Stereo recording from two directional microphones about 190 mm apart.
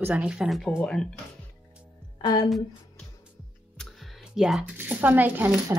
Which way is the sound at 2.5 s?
Centre (ahead or behind).